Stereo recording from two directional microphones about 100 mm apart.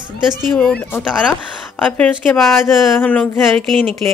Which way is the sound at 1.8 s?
10° left (ahead or behind).